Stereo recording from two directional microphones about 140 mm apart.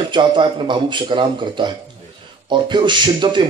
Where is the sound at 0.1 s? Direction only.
35° right (ahead or behind).